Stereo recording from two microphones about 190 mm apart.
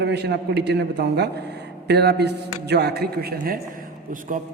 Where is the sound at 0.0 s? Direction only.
60° right (ahead or behind).